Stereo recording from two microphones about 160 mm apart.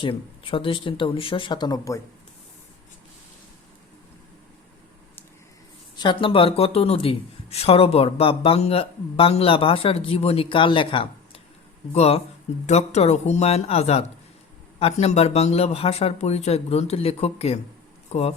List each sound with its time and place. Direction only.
0.0 s speech: 35° left (ahead or behind)
6.0 s speech: 30° left (ahead or behind)